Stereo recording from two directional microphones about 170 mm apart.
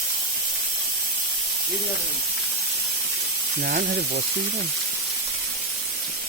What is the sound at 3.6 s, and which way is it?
Speech, 55° right (ahead or behind).